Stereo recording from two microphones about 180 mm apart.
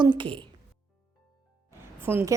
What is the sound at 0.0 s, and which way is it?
Speech, 25° right (ahead or behind).